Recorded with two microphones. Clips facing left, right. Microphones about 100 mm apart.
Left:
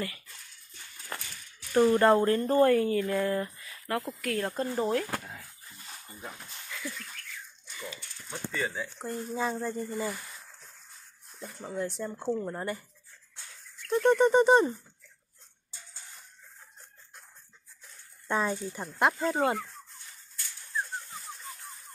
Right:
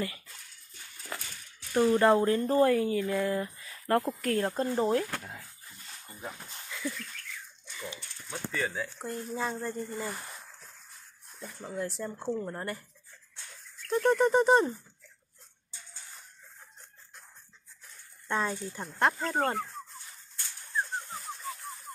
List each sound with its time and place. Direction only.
1.7 s speech: centre (ahead or behind)
3.5 s a sound: 30° right (ahead or behind)
4.1 s speech: 40° right (ahead or behind)
4.4 s speech: 20° right (ahead or behind)
5.1 s a sound: centre (ahead or behind)
6.7 s a sound: 20° right (ahead or behind)
8.3 s speech: centre (ahead or behind)
11.6 s speech: centre (ahead or behind)
13.8 s speech: centre (ahead or behind)
18.3 s speech: 5° left (ahead or behind)